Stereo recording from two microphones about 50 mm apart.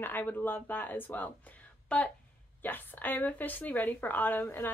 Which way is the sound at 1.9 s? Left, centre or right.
Left.